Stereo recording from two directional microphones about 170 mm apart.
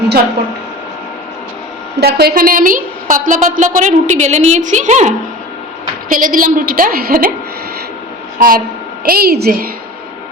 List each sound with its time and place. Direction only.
2.0 s a woman's voice: 70° right (ahead or behind); by 5.1 s 45° right (ahead or behind)
6.1 s a woman's voice: 55° right (ahead or behind)
8.4 s a woman's voice: 60° right (ahead or behind)